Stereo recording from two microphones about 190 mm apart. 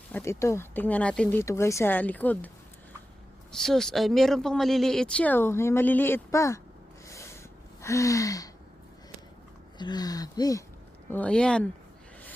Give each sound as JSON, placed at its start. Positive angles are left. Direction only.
{"t": 0.1, "sound": "speech", "side_deg": 15}
{"t": 3.5, "sound": "speech", "side_deg": 0}
{"t": 7.1, "sound": "snort", "side_deg": 15}
{"t": 7.8, "sound": "speech", "side_deg": 15}
{"t": 9.7, "sound": "speech", "side_deg": 20}
{"t": 11.1, "sound": "speech", "side_deg": 5}